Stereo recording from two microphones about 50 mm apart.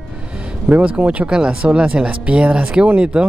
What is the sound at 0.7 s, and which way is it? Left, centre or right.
Speech, right.